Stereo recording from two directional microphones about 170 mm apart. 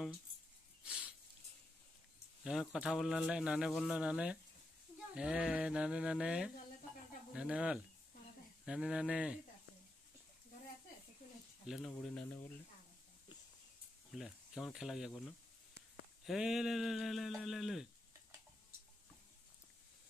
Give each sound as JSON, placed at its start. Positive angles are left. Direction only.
{"t": 0.8, "sound": "a sound", "side_deg": -5}
{"t": 2.4, "sound": "a man's voice", "side_deg": -5}
{"t": 11.6, "sound": "speech", "side_deg": 0}
{"t": 14.1, "sound": "a man's voice", "side_deg": 0}